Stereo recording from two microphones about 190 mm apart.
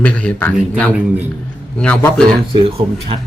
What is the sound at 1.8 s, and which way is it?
Speech, 10° left (ahead or behind).